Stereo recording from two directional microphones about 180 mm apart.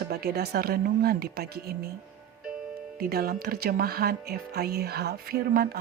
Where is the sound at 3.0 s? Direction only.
55° right (ahead or behind).